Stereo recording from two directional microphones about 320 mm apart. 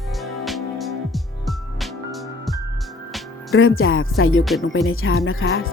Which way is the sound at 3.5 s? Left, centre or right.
Left.